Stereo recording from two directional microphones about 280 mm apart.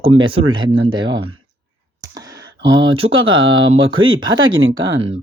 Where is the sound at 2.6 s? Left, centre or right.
Right.